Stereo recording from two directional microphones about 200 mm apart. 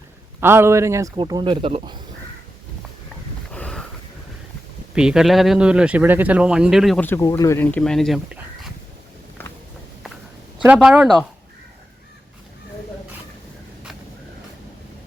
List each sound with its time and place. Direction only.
0.3 s speech: 10° right (ahead or behind)
3.5 s a sound: 5° left (ahead or behind)
4.9 s speech: 5° right (ahead or behind)
9.4 s walk: 10° left (ahead or behind)
10.8 s speech: 5° right (ahead or behind)